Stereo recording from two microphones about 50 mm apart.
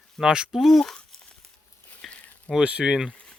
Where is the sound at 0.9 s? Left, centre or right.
Centre.